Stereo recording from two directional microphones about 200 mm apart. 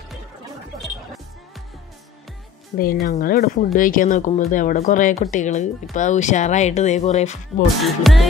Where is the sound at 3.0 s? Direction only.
45° left (ahead or behind).